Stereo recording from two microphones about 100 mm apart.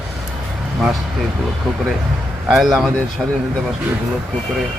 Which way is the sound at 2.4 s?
Centre (ahead or behind).